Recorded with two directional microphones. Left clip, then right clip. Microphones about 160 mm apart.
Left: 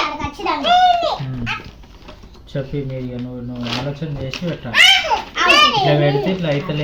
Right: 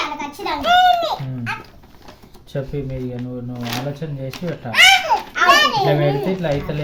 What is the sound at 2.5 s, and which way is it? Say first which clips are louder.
Speech: left 1 dB; 65° right (ahead or behind).